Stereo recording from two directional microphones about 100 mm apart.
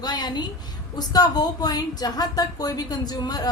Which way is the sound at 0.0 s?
45° left (ahead or behind).